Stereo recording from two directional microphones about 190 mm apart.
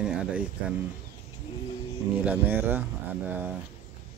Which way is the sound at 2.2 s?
10° right (ahead or behind).